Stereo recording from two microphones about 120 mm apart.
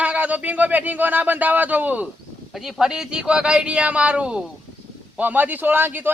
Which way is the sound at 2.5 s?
Centre (ahead or behind).